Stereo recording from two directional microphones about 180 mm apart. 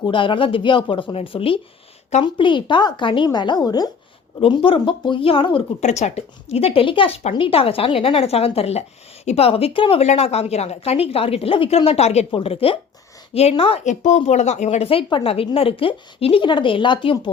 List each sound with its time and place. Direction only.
0.0 s a woman's voice: 25° left (ahead or behind)